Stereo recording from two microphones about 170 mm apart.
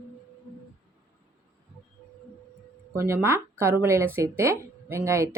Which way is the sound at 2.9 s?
15° right (ahead or behind).